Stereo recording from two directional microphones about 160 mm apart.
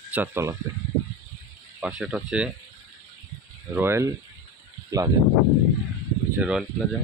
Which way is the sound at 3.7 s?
15° right (ahead or behind).